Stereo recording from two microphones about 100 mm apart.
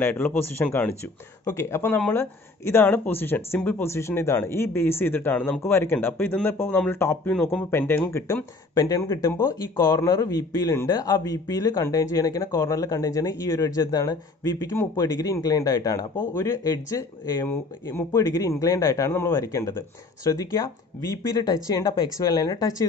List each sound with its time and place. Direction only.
0.0 s speech: 20° left (ahead or behind)
1.4 s speech: 30° left (ahead or behind)
8.7 s speech: 35° left (ahead or behind)